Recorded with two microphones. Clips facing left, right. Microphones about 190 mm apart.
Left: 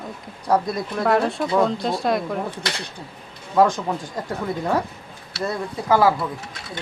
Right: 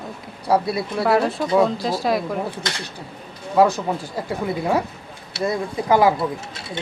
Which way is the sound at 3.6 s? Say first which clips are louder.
Right 1 dB; 10° right (ahead or behind).